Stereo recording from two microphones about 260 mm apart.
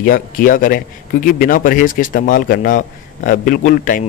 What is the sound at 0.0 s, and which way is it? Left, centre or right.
A man's voice, left.